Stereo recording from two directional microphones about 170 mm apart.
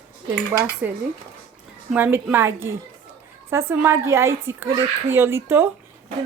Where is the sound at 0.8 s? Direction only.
10° right (ahead or behind).